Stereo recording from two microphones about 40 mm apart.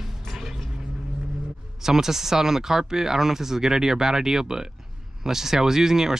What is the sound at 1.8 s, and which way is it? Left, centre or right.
Speech, centre.